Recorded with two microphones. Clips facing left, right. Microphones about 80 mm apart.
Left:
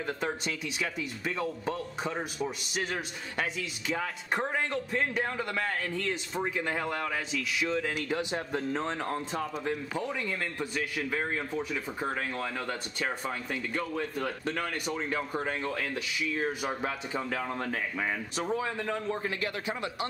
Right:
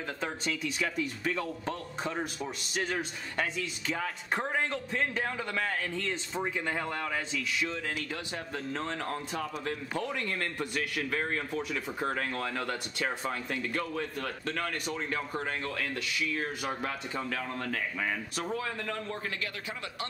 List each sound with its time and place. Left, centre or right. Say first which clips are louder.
0.2 s speech: left 1 dB; centre
3.3 s a man's voice: even; centre
7.7 s a man's voice: left 5 dB; centre